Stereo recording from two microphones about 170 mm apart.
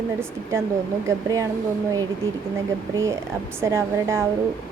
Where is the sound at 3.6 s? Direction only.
15° right (ahead or behind).